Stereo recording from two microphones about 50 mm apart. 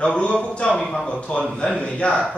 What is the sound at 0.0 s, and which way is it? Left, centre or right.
A man's voice, centre.